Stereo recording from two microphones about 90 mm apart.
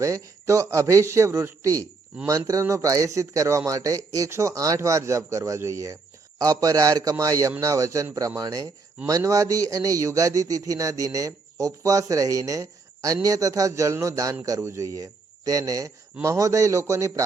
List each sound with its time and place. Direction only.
0.0 s a man's voice: 35° right (ahead or behind)